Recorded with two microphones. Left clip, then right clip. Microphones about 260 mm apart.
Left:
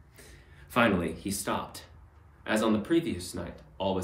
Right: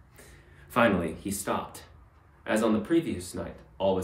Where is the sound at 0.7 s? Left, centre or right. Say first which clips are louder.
Right 2 dB; centre.